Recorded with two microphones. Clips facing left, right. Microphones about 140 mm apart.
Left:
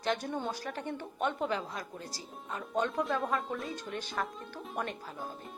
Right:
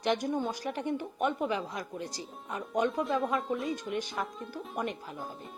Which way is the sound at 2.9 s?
Centre (ahead or behind).